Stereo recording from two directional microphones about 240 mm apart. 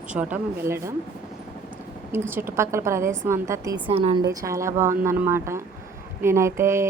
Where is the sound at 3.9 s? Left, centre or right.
Right.